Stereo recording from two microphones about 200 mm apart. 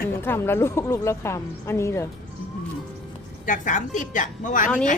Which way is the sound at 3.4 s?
40° left (ahead or behind).